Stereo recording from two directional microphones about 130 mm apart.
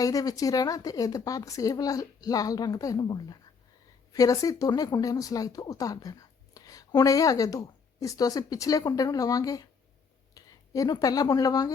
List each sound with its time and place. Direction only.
0.0 s speech: 25° left (ahead or behind)